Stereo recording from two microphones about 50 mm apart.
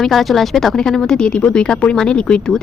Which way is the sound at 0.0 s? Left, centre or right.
Centre.